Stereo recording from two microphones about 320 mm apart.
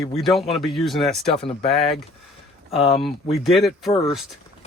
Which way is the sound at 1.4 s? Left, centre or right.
Centre.